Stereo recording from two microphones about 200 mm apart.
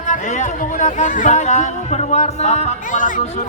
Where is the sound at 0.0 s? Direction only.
35° left (ahead or behind).